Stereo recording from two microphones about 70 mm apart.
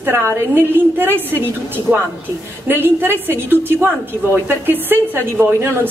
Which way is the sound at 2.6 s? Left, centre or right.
Right.